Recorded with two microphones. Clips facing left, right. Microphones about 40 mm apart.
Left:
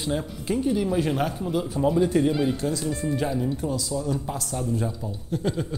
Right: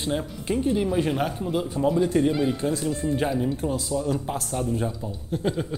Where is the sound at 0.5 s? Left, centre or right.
Right.